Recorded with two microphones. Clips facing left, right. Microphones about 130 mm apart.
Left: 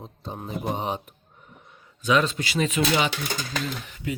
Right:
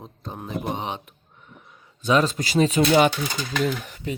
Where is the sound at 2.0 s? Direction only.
35° right (ahead or behind).